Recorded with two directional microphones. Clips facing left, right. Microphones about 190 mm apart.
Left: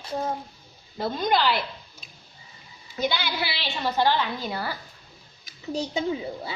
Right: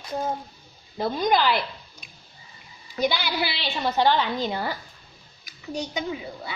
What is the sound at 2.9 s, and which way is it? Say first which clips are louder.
A woman's voice: right 2 dB; 15° right (ahead or behind).